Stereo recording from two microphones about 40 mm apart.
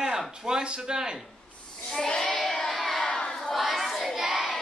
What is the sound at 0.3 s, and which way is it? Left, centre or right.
Speech, centre.